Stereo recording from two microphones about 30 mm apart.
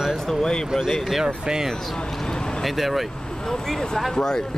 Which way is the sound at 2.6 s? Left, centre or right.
Centre.